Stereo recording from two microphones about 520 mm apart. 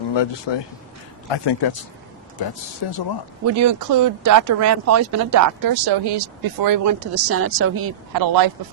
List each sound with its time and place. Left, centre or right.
0.1 s speech: left
3.4 s speech: right
8.1 s speech: right